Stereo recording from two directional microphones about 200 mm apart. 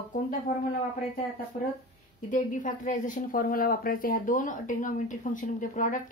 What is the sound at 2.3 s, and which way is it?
A woman's voice, 40° left (ahead or behind).